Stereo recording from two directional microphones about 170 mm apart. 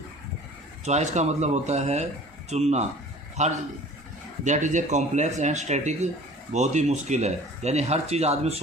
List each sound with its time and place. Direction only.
0.9 s speech: 40° right (ahead or behind)